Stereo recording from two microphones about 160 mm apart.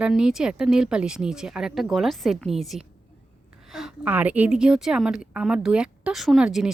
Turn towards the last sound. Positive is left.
turn(degrees=-5)  # may be behind; listen again after turning